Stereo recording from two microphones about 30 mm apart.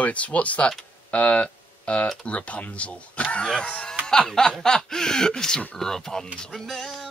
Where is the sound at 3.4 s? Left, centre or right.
Left.